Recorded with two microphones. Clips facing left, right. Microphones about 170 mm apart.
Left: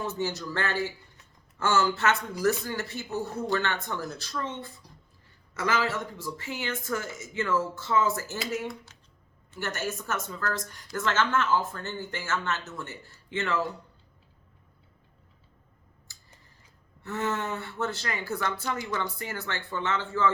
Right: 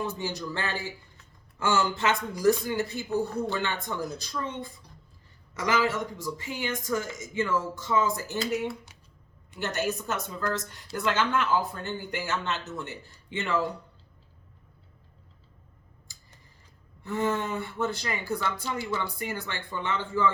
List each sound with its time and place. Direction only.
0.1 s speech: 15° right (ahead or behind)
9.5 s speech: 20° right (ahead or behind)
17.0 s speech: 15° right (ahead or behind)